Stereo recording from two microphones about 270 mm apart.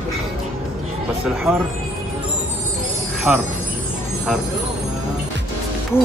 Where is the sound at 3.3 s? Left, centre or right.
Centre.